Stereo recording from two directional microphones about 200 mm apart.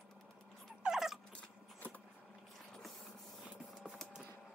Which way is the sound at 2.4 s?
Centre (ahead or behind).